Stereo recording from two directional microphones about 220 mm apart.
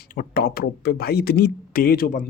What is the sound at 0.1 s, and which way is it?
Speech, 40° left (ahead or behind).